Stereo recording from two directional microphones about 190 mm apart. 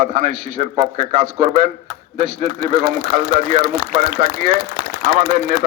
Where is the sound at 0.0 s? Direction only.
40° right (ahead or behind).